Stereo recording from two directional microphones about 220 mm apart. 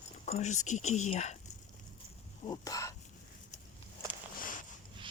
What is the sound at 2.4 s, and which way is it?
Speech, 15° left (ahead or behind).